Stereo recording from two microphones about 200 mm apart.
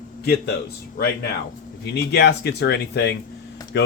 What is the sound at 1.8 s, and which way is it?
Speech, 55° left (ahead or behind).